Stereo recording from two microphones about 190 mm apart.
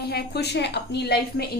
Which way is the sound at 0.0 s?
55° left (ahead or behind).